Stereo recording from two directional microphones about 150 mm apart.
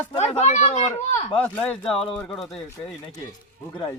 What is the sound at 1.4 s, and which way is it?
Speech, 10° left (ahead or behind).